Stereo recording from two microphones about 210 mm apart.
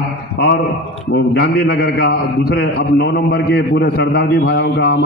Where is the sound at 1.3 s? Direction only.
50° left (ahead or behind).